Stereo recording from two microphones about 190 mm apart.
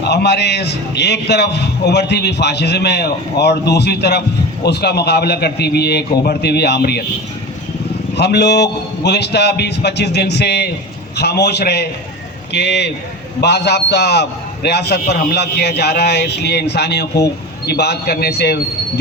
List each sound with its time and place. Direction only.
0.0 s a man's voice: 60° left (ahead or behind)
8.1 s a man's voice: 60° left (ahead or behind)